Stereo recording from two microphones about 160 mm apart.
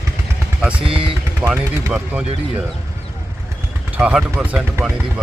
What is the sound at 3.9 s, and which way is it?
Speech, 5° right (ahead or behind).